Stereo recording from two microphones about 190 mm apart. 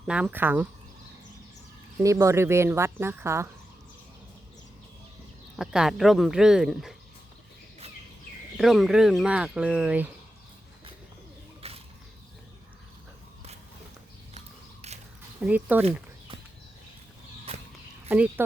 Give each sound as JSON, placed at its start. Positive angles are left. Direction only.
{"t": 0.1, "sound": "speech", "side_deg": -5}
{"t": 2.0, "sound": "speech", "side_deg": -15}
{"t": 5.5, "sound": "speech", "side_deg": -5}
{"t": 8.5, "sound": "speech", "side_deg": 0}
{"t": 11.6, "sound": "mechanisms", "side_deg": -30}
{"t": 14.3, "sound": "a sound", "side_deg": -35}
{"t": 15.4, "sound": "speech", "side_deg": -5}
{"t": 17.5, "sound": "a sound", "side_deg": -30}
{"t": 18.1, "sound": "speech", "side_deg": -10}